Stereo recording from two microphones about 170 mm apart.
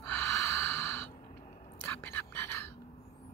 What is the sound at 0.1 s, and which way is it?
Snort, 15° left (ahead or behind).